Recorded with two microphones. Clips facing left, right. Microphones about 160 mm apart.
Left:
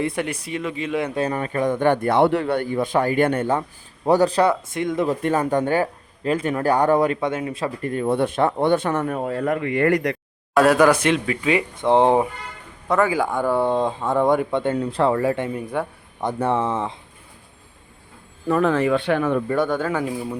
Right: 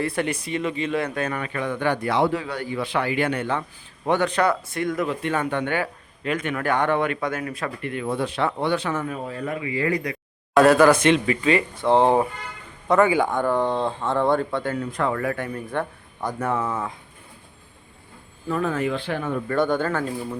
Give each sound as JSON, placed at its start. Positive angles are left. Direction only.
{"t": 0.0, "sound": "speech", "side_deg": 20}
{"t": 0.4, "sound": "speech", "side_deg": 5}
{"t": 1.1, "sound": "a man's voice", "side_deg": 35}
{"t": 4.7, "sound": "speech", "side_deg": 20}
{"t": 5.0, "sound": "speech", "side_deg": 40}
{"t": 7.8, "sound": "speech", "side_deg": 40}
{"t": 8.1, "sound": "a man's voice", "side_deg": 55}
{"t": 10.5, "sound": "speech", "side_deg": 10}
{"t": 11.7, "sound": "speech", "side_deg": 20}
{"t": 12.9, "sound": "speech", "side_deg": 0}
{"t": 14.6, "sound": "speech", "side_deg": 30}
{"t": 18.4, "sound": "speech", "side_deg": 80}
{"t": 19.6, "sound": "speech", "side_deg": 5}
{"t": 20.0, "sound": "speech", "side_deg": 15}